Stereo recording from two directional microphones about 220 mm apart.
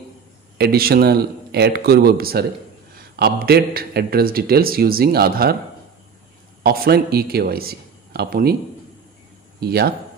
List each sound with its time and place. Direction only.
0.6 s a man's voice: 45° right (ahead or behind)
6.6 s speech: 45° right (ahead or behind)
9.6 s a man's voice: 45° right (ahead or behind)